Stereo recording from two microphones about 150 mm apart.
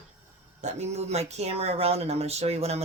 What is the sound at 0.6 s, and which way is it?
Speech, 45° right (ahead or behind).